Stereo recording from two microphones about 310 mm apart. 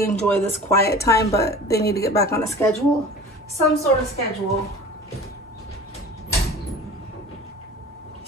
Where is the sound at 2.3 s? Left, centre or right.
Centre.